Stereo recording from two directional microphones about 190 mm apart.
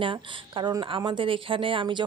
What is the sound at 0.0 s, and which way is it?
Speech, 25° right (ahead or behind).